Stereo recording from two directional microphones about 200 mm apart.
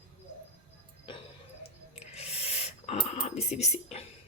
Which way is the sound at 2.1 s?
30° left (ahead or behind).